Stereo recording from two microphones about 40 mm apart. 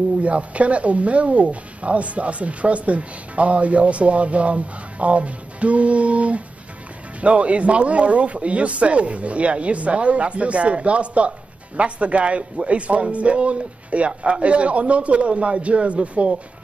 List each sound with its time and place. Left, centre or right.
0.2 s speech: right